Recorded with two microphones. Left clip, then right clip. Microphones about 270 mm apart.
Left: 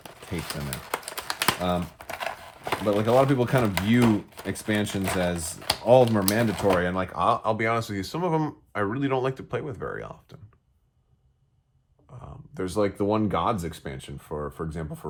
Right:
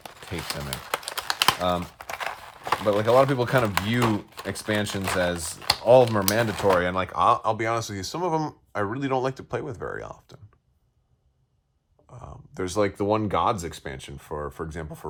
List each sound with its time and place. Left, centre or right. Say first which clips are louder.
0.3 s speech: right 2 dB; centre
1.0 s typing: right 4 dB; centre
2.0 s crumpling: right 1 dB; centre
2.8 s speech: right 2 dB; right
12.1 s speech: right 1 dB; right